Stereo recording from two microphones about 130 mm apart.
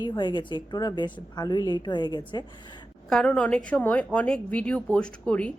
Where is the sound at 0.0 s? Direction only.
35° left (ahead or behind).